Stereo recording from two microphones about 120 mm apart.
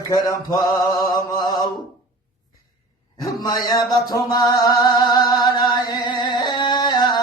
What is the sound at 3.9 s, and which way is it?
Music, 30° left (ahead or behind).